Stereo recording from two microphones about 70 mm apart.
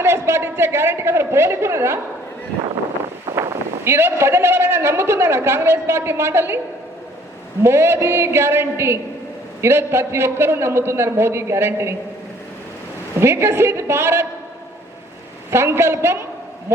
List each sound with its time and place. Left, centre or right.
0.0 s a man's voice: right
3.2 s a man's voice: right
7.6 s a man's voice: right
13.1 s a man's voice: right
15.4 s a man's voice: right